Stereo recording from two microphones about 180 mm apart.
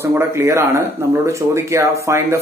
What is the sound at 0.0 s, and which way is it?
Speech, 15° right (ahead or behind).